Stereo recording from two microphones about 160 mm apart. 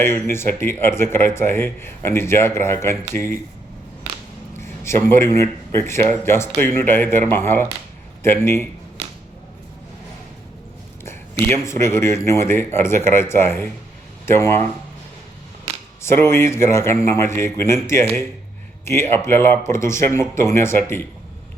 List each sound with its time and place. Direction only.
0.0 s speech: 15° left (ahead or behind)
4.6 s a man's voice: 15° left (ahead or behind)
11.4 s speech: 15° left (ahead or behind)
16.0 s speech: 15° left (ahead or behind)